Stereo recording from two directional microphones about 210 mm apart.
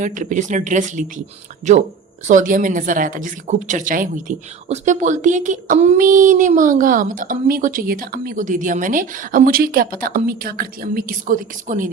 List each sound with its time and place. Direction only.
0.0 s a woman's voice: 35° right (ahead or behind)